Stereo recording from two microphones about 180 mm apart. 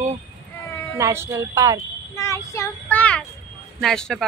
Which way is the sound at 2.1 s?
15° left (ahead or behind).